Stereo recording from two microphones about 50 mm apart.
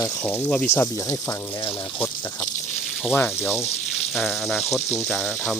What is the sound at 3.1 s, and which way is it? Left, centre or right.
Speech, left.